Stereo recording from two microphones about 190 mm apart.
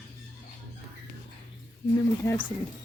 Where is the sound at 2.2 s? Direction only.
15° left (ahead or behind).